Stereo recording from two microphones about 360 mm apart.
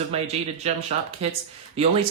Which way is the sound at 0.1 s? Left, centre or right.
Centre.